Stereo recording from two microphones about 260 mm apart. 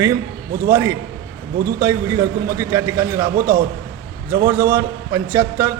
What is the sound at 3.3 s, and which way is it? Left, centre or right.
Speech, right.